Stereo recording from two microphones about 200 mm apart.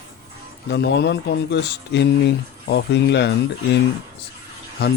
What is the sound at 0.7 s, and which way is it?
Speech, 60° left (ahead or behind).